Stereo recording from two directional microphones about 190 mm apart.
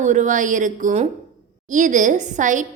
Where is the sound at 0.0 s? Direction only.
40° right (ahead or behind).